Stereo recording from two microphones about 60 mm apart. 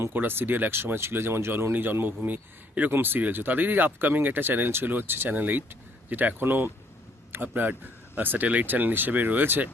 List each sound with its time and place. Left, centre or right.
0.1 s speech: right